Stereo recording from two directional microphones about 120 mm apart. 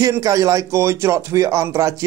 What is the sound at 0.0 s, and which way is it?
Music, 30° right (ahead or behind).